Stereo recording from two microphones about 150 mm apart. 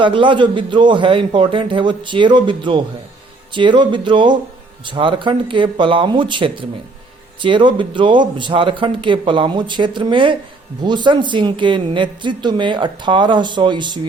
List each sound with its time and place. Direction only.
0.0 s speech: 35° right (ahead or behind)